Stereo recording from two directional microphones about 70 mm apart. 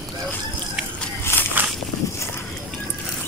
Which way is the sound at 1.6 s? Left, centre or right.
Right.